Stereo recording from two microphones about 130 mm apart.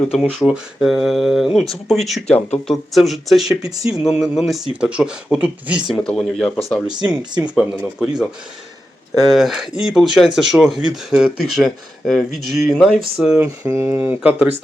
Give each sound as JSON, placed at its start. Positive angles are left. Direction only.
{"t": 0.1, "sound": "speech", "side_deg": 0}
{"t": 5.9, "sound": "speech", "side_deg": 5}
{"t": 9.3, "sound": "speech", "side_deg": 0}
{"t": 13.7, "sound": "speech", "side_deg": -20}